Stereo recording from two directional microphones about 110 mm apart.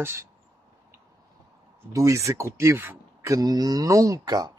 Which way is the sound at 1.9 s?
30° right (ahead or behind).